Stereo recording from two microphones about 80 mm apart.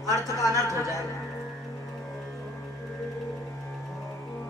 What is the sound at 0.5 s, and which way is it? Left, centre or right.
Speech, right.